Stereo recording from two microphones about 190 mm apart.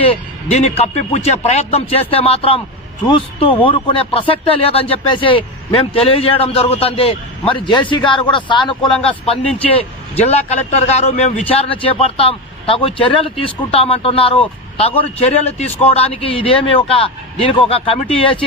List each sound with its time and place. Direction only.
0.0 s a man's voice: 30° left (ahead or behind)